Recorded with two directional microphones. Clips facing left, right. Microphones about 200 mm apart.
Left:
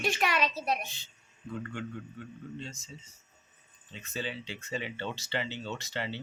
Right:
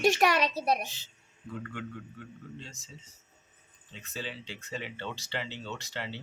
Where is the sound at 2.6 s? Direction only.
Centre (ahead or behind).